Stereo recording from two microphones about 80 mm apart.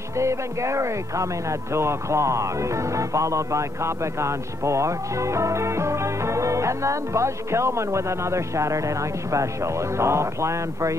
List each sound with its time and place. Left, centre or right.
0.2 s speech: right